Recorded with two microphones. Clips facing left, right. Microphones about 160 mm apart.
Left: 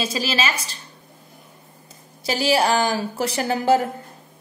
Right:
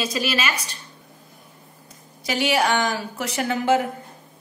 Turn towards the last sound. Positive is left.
turn(degrees=35)  # may be behind; listen again after turning